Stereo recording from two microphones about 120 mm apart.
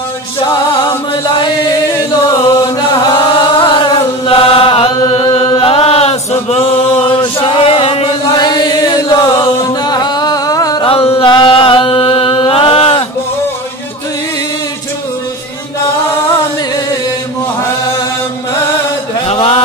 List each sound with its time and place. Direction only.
3.1 s chant: 40° left (ahead or behind)
8.3 s chant: 40° left (ahead or behind)
9.7 s music: 35° left (ahead or behind)
10.9 s chant: 55° left (ahead or behind)
19.2 s a sound: 60° left (ahead or behind)